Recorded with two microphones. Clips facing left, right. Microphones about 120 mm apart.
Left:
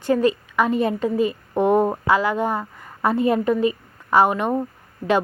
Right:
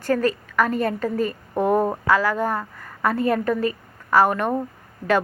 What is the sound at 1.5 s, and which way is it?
A woman's voice, 20° left (ahead or behind).